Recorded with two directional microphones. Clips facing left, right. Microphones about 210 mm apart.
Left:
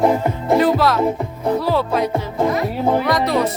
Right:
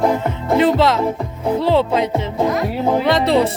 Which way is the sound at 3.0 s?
25° right (ahead or behind).